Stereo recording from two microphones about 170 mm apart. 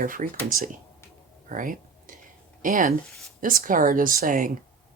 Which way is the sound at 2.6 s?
50° right (ahead or behind).